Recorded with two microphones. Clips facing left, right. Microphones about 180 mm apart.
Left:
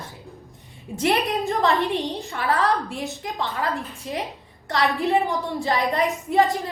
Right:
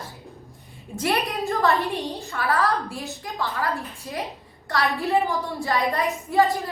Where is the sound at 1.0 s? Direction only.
20° left (ahead or behind).